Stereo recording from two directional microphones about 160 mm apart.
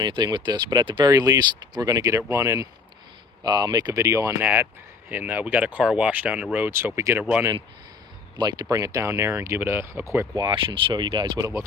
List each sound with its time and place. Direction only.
0.0 s speech: 25° right (ahead or behind); by 7.4 s 10° right (ahead or behind)
8.4 s speech: 25° right (ahead or behind)